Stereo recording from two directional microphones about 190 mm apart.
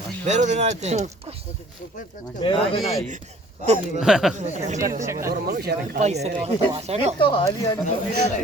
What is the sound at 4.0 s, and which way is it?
Speech, 5° right (ahead or behind).